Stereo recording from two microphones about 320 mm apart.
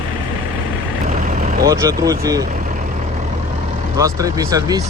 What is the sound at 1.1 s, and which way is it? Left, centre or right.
Vehicle, right.